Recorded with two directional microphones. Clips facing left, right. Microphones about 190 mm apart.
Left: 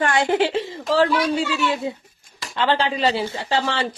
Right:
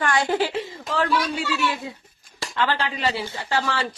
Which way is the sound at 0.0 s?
25° left (ahead or behind).